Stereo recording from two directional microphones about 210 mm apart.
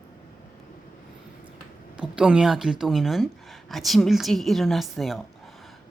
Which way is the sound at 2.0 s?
5° right (ahead or behind).